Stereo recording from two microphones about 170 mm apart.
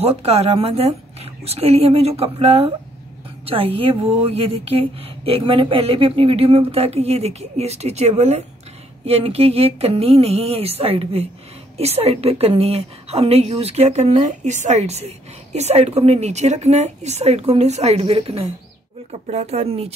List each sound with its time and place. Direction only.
0.0 s a woman's voice: 35° right (ahead or behind)